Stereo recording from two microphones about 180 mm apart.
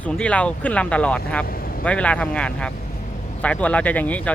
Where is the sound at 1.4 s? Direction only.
55° left (ahead or behind).